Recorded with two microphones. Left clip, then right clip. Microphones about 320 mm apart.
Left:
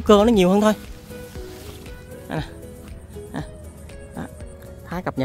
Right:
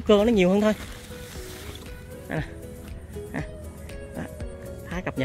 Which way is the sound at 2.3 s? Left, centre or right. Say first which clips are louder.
Left 2 dB; centre.